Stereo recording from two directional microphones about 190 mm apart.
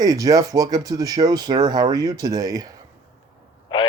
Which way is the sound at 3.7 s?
25° left (ahead or behind).